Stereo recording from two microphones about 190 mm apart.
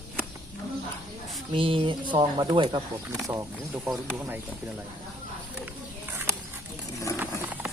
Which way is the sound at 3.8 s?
10° right (ahead or behind).